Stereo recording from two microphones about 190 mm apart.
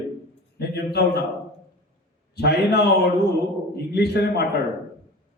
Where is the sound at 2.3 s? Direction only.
60° left (ahead or behind).